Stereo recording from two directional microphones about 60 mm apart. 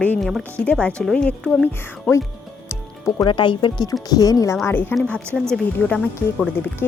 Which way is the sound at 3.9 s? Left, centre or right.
Left.